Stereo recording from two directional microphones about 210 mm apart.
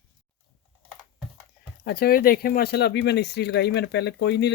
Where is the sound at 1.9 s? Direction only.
45° left (ahead or behind).